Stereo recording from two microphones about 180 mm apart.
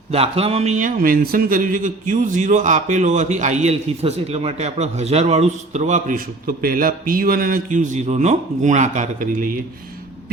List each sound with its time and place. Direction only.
0.1 s a man's voice: 35° right (ahead or behind)